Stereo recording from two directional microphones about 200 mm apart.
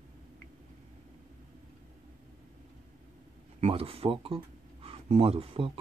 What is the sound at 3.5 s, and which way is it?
Speech, 30° right (ahead or behind).